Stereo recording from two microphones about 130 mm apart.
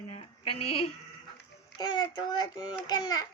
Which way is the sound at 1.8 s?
35° left (ahead or behind).